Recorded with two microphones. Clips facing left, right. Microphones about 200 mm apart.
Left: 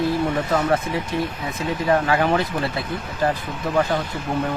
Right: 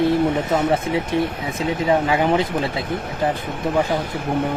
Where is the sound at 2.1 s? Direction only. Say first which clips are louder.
Right 2 dB; 20° right (ahead or behind).